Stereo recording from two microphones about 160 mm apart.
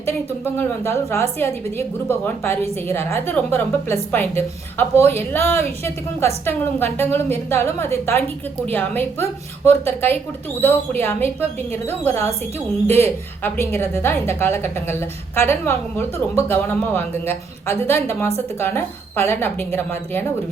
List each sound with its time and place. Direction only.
0.5 s a woman's voice: 15° left (ahead or behind)